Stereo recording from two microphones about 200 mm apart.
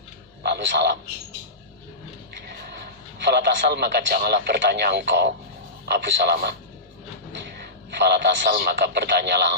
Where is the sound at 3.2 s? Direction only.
60° right (ahead or behind).